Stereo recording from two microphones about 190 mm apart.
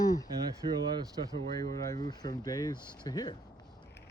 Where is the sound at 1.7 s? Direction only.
20° left (ahead or behind).